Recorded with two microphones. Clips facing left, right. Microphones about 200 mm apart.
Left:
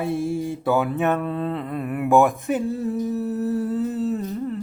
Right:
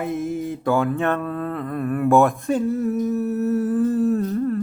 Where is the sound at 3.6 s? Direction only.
25° left (ahead or behind).